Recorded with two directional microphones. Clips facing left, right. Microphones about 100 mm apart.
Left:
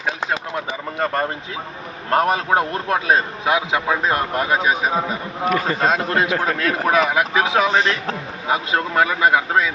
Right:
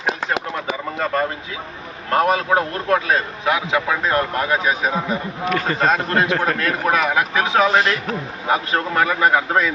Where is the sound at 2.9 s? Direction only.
25° left (ahead or behind).